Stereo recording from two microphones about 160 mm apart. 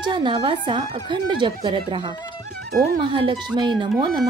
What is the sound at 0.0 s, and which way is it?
Speech, 30° right (ahead or behind).